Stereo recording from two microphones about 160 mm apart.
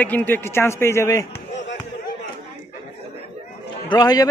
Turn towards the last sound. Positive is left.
turn(degrees=25)  # may be behind; listen again after turning